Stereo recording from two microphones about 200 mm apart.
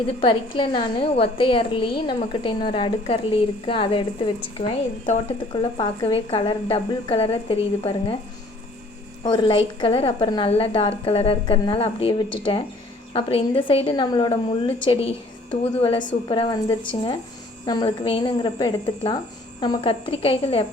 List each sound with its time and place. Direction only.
0.0 s a woman's voice: 25° left (ahead or behind)
9.2 s a woman's voice: 25° left (ahead or behind)